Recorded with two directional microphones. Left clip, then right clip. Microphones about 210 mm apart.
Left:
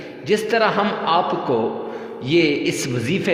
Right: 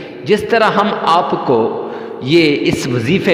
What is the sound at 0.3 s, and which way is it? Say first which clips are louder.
A man's voice: right 6 dB; 25° right (ahead or behind).